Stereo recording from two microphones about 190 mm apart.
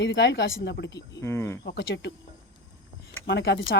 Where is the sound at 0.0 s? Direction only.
65° left (ahead or behind).